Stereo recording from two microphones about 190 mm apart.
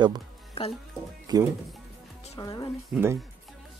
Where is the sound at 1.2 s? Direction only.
20° right (ahead or behind).